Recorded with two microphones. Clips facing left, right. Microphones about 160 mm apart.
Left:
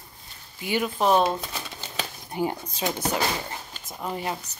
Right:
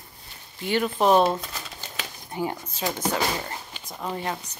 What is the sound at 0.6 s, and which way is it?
Speech, 5° left (ahead or behind).